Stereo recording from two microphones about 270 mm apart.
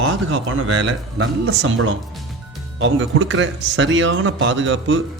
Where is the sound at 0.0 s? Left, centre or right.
Right.